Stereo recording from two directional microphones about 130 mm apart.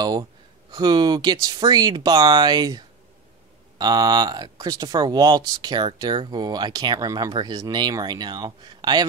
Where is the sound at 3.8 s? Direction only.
35° right (ahead or behind).